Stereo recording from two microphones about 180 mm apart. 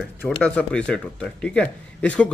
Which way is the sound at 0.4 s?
5° left (ahead or behind).